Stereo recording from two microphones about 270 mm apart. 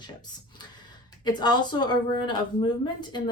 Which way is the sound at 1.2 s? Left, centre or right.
Centre.